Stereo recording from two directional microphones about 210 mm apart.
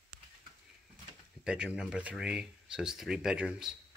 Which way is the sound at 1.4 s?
5° right (ahead or behind).